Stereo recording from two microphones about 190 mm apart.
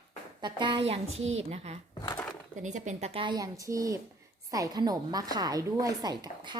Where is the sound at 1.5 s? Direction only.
35° right (ahead or behind).